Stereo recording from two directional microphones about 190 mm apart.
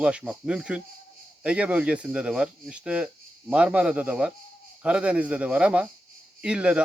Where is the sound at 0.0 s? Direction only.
5° right (ahead or behind).